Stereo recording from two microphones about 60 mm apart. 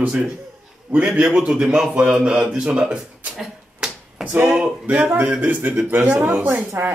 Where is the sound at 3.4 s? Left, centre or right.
Centre.